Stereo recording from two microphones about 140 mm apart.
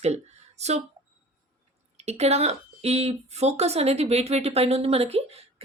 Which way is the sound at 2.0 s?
50° right (ahead or behind).